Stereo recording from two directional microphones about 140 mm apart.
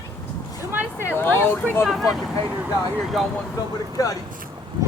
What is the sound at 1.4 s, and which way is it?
Speech, 10° left (ahead or behind).